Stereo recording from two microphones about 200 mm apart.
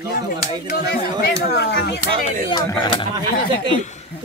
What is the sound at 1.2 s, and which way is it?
Speech, 55° left (ahead or behind).